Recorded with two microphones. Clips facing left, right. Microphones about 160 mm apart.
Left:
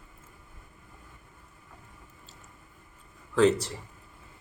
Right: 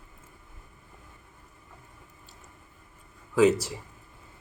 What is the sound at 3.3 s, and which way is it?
Speech, 5° right (ahead or behind).